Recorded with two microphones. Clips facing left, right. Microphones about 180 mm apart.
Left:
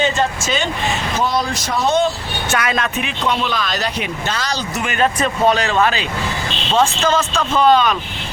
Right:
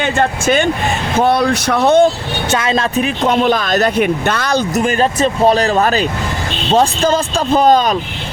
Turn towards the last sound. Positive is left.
turn(degrees=-40)  # may be behind; listen again after turning